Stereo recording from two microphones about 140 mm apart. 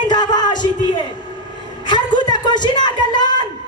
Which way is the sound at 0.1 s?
30° left (ahead or behind).